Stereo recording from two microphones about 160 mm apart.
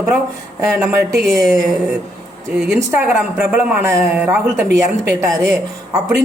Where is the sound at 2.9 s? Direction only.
15° right (ahead or behind).